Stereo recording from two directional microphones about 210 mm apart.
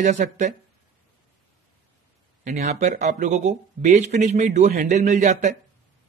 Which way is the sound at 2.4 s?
30° right (ahead or behind).